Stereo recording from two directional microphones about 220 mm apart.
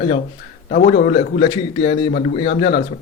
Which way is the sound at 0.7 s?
40° left (ahead or behind).